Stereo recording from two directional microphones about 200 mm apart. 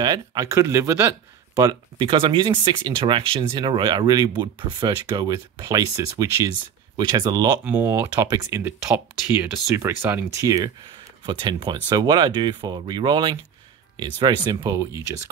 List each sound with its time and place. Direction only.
0.0 s speech: 20° right (ahead or behind)